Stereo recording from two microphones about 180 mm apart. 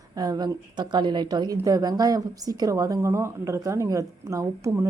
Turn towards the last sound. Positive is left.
turn(degrees=-15)  # may be behind; listen again after turning